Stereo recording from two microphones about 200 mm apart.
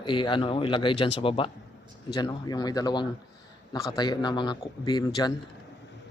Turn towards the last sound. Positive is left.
turn(degrees=20)  # may be behind; listen again after turning